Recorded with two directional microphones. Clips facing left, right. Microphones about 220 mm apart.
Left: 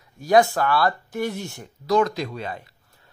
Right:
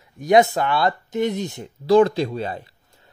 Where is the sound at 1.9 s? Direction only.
30° right (ahead or behind).